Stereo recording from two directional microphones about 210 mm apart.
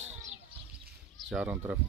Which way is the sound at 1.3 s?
10° right (ahead or behind).